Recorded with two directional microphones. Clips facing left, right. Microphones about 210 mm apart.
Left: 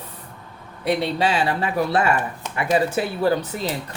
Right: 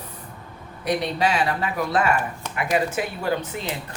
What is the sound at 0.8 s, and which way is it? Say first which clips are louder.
Speech: left 2 dB; 30° left (ahead or behind).